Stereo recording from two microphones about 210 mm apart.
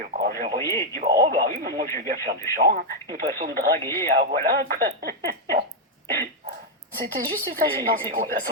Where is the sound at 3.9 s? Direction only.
50° right (ahead or behind).